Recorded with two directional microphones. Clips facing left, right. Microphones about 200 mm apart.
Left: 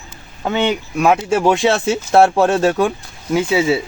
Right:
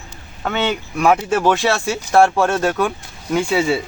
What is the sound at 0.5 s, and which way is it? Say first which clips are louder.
Speech: left 3 dB; 5° left (ahead or behind).